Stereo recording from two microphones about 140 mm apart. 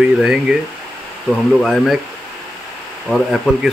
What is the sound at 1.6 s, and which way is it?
Speech, centre (ahead or behind).